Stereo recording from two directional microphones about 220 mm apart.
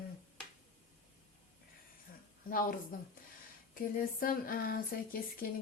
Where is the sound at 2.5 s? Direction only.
40° left (ahead or behind).